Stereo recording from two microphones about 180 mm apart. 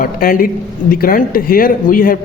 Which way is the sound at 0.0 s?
50° left (ahead or behind).